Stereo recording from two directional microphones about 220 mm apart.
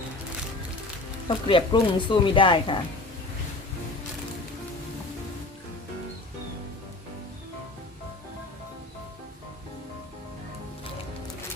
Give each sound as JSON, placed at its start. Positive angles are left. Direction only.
{"t": 1.3, "sound": "speech", "side_deg": 20}